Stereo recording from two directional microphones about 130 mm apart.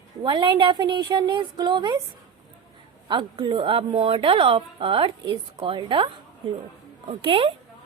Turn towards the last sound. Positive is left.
turn(degrees=-45)  # may be behind; listen again after turning